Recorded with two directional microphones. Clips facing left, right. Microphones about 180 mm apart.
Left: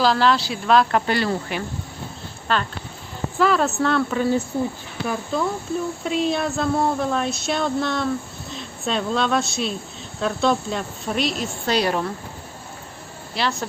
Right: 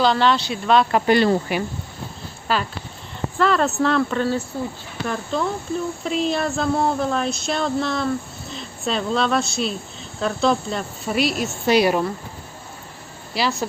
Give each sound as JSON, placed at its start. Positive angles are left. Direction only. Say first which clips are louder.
{"t": 0.0, "sound": "speech", "louder": "even", "side_deg": 0}
{"t": 1.0, "sound": "speech", "louder": "right 6 dB", "side_deg": -20}
{"t": 4.5, "sound": "speech", "louder": "left 3 dB", "side_deg": 15}
{"t": 5.0, "sound": "speech", "louder": "even", "side_deg": 5}
{"t": 13.3, "sound": "speech", "louder": "right 2 dB", "side_deg": -5}